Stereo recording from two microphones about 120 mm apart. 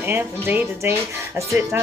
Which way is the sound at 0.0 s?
15° right (ahead or behind).